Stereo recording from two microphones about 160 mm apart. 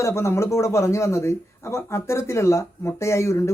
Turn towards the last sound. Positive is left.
turn(degrees=15)  # may be behind; listen again after turning